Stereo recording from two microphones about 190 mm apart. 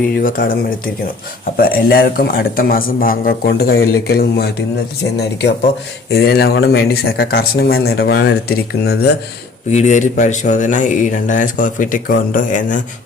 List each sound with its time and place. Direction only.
0.2 s a man's voice: 45° left (ahead or behind)
1.5 s a man's voice: 50° left (ahead or behind)
9.6 s speech: 40° left (ahead or behind)